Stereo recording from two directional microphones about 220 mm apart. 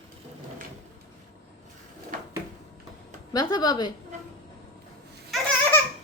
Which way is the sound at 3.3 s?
15° left (ahead or behind).